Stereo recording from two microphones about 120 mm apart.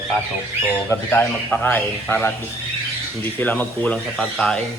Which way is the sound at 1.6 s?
15° left (ahead or behind).